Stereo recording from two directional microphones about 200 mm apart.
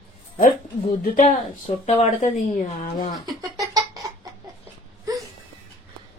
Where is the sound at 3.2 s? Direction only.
20° right (ahead or behind).